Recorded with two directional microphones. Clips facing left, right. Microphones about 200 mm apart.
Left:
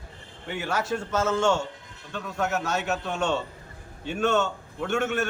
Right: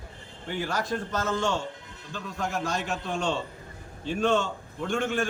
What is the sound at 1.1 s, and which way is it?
Speech, 90° left.